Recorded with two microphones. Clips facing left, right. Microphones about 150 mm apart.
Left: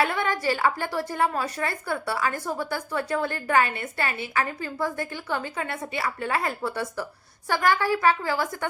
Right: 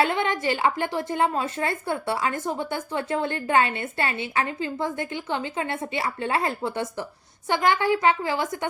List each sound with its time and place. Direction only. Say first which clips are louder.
0.0 s a woman's voice: right 2 dB; 20° right (ahead or behind)